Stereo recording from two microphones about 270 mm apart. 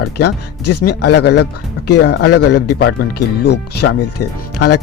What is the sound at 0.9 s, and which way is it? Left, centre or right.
Speech, left.